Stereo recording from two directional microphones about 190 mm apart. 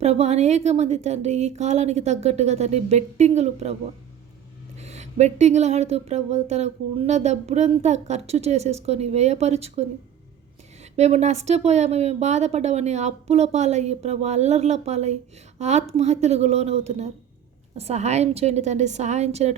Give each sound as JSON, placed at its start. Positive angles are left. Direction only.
{"t": 0.0, "sound": "speech", "side_deg": -35}
{"t": 4.8, "sound": "speech", "side_deg": -35}
{"t": 10.9, "sound": "speech", "side_deg": -35}